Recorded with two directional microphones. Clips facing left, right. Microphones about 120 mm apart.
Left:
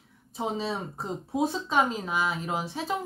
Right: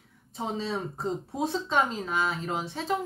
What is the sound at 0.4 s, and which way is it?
Speech, 10° left (ahead or behind).